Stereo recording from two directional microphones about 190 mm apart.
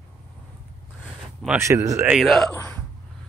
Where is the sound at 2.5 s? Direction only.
15° left (ahead or behind).